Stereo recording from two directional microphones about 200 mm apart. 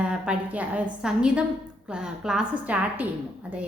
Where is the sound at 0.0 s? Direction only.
5° right (ahead or behind).